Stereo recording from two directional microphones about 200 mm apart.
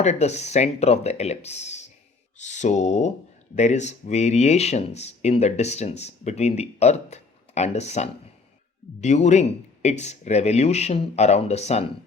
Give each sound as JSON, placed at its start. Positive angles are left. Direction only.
{"t": 0.0, "sound": "speech", "side_deg": 35}